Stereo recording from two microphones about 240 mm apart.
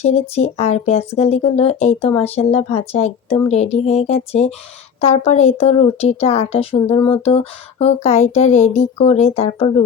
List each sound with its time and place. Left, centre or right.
0.0 s a woman's voice: left